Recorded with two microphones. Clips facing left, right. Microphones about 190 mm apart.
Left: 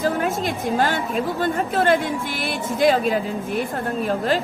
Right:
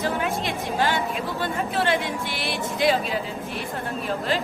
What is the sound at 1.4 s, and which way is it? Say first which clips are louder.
A woman's voice: left 3 dB; 50° left (ahead or behind).